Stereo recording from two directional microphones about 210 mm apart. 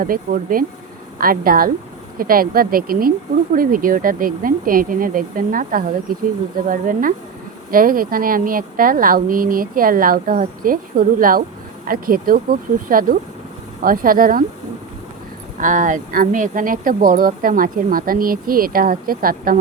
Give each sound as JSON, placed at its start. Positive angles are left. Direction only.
{"t": 0.0, "sound": "speech", "side_deg": -40}
{"t": 15.5, "sound": "speech", "side_deg": -40}